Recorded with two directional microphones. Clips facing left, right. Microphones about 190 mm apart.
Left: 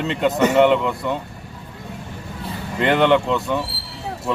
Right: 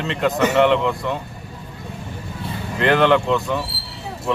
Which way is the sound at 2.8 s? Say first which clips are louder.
Even; centre (ahead or behind).